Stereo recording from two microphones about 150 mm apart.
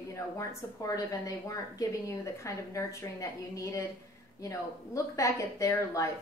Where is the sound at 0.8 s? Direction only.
20° left (ahead or behind).